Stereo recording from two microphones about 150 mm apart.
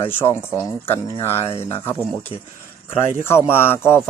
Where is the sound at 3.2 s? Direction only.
15° left (ahead or behind).